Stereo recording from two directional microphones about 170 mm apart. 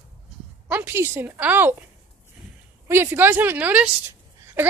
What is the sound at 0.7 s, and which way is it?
A woman's voice, 15° right (ahead or behind).